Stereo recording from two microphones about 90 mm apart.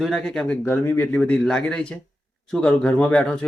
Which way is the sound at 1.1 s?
10° left (ahead or behind).